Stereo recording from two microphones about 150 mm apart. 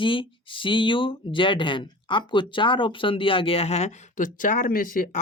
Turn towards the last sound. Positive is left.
turn(degrees=70)  # may be behind; listen again after turning